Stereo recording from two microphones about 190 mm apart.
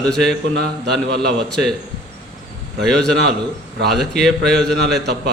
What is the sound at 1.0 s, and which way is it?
Speech, 65° right (ahead or behind).